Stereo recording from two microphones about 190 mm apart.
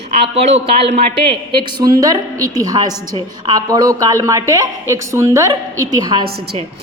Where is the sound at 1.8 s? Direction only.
20° right (ahead or behind).